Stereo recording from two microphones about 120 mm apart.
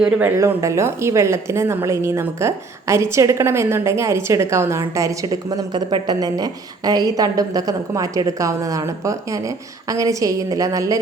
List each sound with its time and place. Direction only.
0.3 s a woman's voice: 25° right (ahead or behind)